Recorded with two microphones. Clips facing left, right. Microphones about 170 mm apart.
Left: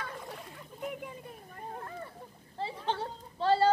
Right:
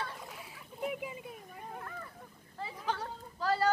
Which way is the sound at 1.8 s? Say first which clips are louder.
Left 3 dB; 30° left (ahead or behind).